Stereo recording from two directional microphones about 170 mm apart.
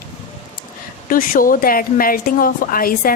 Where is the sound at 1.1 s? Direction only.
55° left (ahead or behind).